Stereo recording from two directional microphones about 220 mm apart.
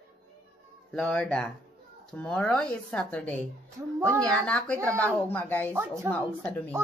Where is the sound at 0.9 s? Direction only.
5° left (ahead or behind).